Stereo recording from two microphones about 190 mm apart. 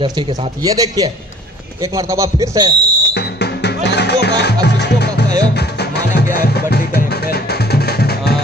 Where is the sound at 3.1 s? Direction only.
60° left (ahead or behind).